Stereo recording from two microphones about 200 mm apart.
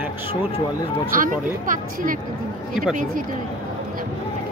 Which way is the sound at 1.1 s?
45° right (ahead or behind).